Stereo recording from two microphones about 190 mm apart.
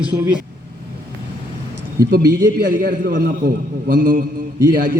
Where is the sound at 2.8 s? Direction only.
55° right (ahead or behind).